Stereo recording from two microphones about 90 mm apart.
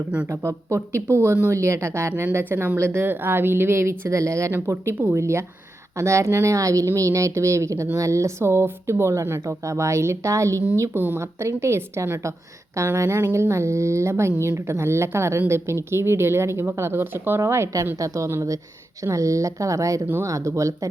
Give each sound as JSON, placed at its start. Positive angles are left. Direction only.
{"t": 0.3, "sound": "a woman's voice", "side_deg": -35}